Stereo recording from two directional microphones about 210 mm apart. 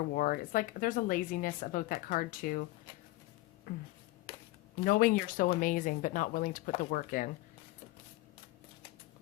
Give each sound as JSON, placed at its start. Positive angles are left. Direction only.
{"t": 0.1, "sound": "speech", "side_deg": 40}
{"t": 3.7, "sound": "speech", "side_deg": 40}